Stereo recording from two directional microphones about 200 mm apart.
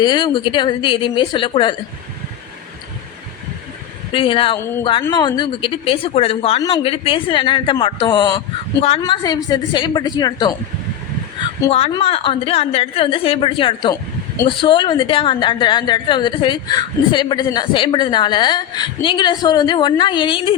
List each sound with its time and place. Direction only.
0.0 s a woman's voice: 20° left (ahead or behind)
4.1 s a woman's voice: 25° left (ahead or behind)
4.6 s a woman's voice: 15° left (ahead or behind)
11.7 s a woman's voice: 30° left (ahead or behind)